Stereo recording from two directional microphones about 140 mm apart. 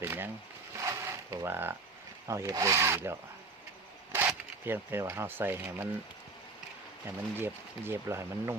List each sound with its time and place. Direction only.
0.0 s speech: 15° right (ahead or behind)
0.8 s a sound: 20° right (ahead or behind)
2.2 s wood: 20° right (ahead or behind)
4.1 s speech: 15° right (ahead or behind)
7.3 s speech: 15° right (ahead or behind)